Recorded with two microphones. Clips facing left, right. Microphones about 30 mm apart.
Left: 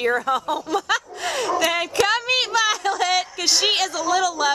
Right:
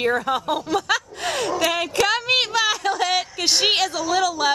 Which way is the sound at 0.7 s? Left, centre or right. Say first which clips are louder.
Even; centre.